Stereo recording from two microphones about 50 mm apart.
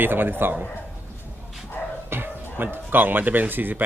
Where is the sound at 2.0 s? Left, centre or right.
Right.